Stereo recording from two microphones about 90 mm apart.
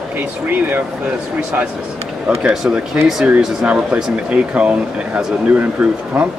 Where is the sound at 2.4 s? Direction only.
10° right (ahead or behind).